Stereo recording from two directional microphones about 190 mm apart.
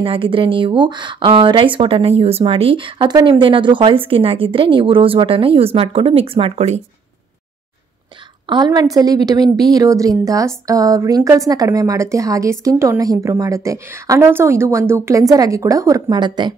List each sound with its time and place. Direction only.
0.0 s speech: 30° right (ahead or behind)
8.5 s a woman's voice: 20° right (ahead or behind)